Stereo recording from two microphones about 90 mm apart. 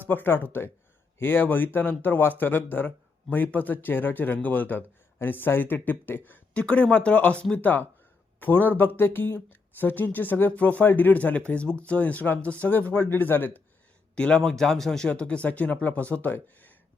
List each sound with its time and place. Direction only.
0.1 s speech: 20° left (ahead or behind)
14.2 s speech: 10° left (ahead or behind)